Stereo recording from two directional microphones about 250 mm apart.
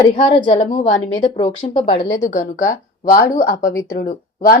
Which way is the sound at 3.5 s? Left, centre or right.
Left.